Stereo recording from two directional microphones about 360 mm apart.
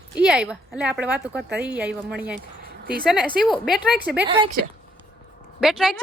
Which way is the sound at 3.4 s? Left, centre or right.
Centre.